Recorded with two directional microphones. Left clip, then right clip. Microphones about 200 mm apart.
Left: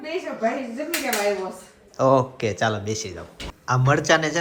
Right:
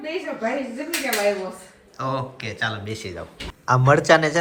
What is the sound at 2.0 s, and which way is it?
Speech, 40° left (ahead or behind).